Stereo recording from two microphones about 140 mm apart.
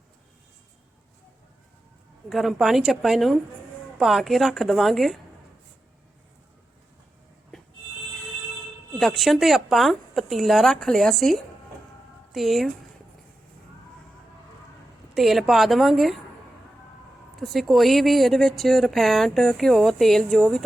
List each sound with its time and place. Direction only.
2.3 s a woman's voice: centre (ahead or behind)
9.0 s a woman's voice: centre (ahead or behind)
15.1 s a woman's voice: centre (ahead or behind)
17.4 s a woman's voice: centre (ahead or behind)